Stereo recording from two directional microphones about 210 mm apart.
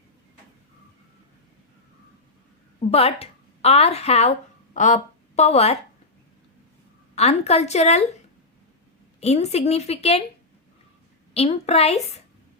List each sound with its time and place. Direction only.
2.9 s a woman's voice: 30° left (ahead or behind)
7.2 s a woman's voice: 30° left (ahead or behind)
9.2 s speech: 30° left (ahead or behind)
11.3 s speech: 30° left (ahead or behind)